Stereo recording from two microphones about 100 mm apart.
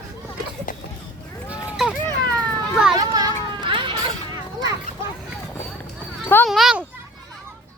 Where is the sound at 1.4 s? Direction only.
10° right (ahead or behind).